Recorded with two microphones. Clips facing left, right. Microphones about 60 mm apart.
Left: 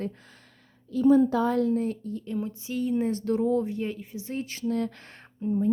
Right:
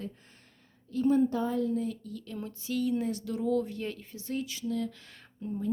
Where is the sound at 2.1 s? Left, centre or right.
Left.